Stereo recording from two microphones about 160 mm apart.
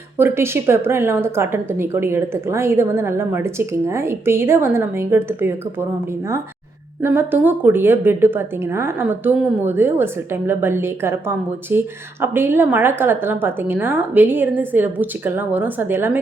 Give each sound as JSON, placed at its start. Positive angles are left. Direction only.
{"t": 0.2, "sound": "a woman's voice", "side_deg": -15}
{"t": 7.0, "sound": "a woman's voice", "side_deg": -15}